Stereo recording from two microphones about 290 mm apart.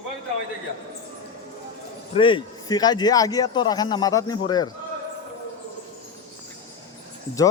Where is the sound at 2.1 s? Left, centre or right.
Centre.